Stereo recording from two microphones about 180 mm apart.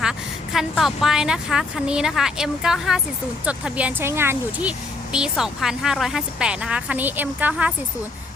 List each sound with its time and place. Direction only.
0.0 s a woman's voice: 5° right (ahead or behind)